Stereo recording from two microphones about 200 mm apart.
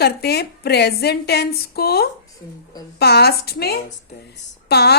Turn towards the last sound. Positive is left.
turn(degrees=55)  # may be behind; listen again after turning